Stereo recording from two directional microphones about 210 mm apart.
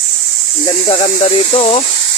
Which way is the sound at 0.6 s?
25° left (ahead or behind).